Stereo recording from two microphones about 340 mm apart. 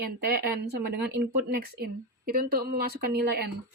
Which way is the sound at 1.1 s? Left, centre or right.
Right.